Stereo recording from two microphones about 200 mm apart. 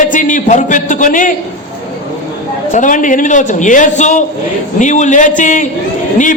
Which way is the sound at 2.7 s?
40° left (ahead or behind).